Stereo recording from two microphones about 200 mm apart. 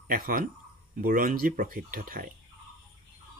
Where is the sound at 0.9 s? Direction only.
45° right (ahead or behind).